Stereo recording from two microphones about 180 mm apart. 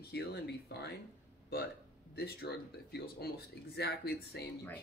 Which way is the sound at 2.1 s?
60° left (ahead or behind).